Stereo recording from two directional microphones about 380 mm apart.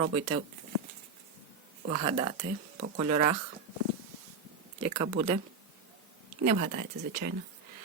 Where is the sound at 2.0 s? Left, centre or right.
Centre.